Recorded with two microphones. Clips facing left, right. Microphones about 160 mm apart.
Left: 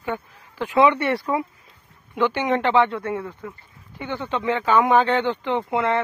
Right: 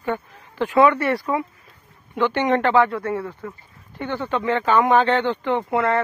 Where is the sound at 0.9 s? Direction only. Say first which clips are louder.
Right 1 dB; 25° left (ahead or behind).